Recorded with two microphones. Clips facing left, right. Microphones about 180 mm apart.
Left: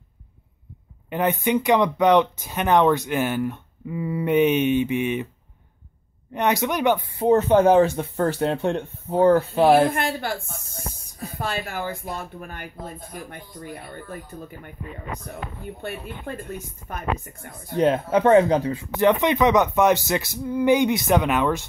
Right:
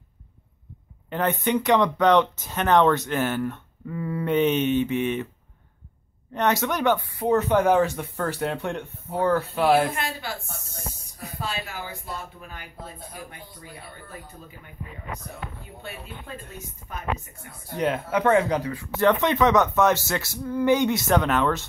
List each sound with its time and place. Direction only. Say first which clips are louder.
1.1 s speech: left 2 dB; 10° left (ahead or behind)
6.3 s speech: left 1 dB; 15° left (ahead or behind); by 9.8 s 30° left (ahead or behind)
9.9 s speech: left 5 dB; 55° left (ahead or behind)
11.4 s speech: left 5 dB; 50° left (ahead or behind)
15.6 s speech: left 7 dB; 50° left (ahead or behind)
17.4 s speech: left 6 dB; 55° left (ahead or behind)
17.7 s speech: left 5 dB; 30° left (ahead or behind); by 21.6 s 10° left (ahead or behind)